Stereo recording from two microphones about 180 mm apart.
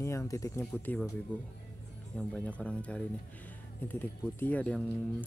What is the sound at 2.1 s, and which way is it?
Speech, 5° left (ahead or behind).